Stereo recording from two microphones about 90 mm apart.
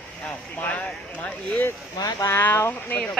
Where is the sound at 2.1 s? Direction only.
30° left (ahead or behind).